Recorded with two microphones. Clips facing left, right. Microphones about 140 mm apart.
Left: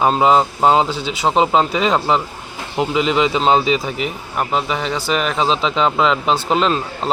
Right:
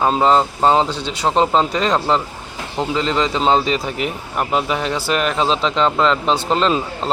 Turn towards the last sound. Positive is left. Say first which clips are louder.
# even
turn(degrees=5)  # may be behind; listen again after turning